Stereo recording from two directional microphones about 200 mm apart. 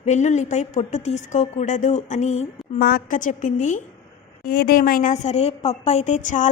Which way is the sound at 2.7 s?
50° left (ahead or behind).